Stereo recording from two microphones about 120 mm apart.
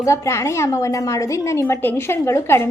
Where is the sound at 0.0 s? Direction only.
25° left (ahead or behind).